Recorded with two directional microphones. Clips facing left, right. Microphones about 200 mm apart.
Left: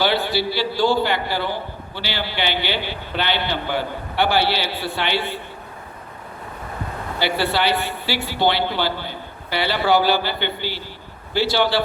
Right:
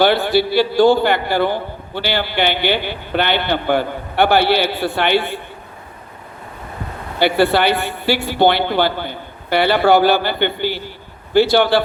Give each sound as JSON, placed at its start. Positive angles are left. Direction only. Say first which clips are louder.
{"t": 0.0, "sound": "a man's voice", "louder": "right 6 dB", "side_deg": -55}
{"t": 7.2, "sound": "a man's voice", "louder": "right 7 dB", "side_deg": -55}